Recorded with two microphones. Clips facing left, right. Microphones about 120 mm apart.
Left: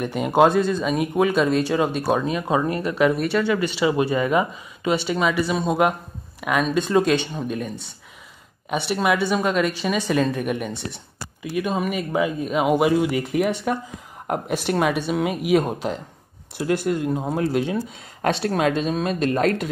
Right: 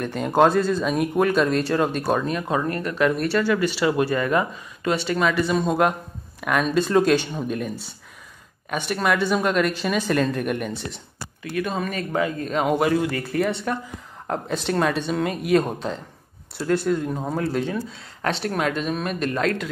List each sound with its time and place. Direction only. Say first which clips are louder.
0.0 s speech: left 1 dB; 5° left (ahead or behind)
11.4 s speech: left 2 dB; 15° left (ahead or behind)
19.3 s speech: left 2 dB; 40° left (ahead or behind)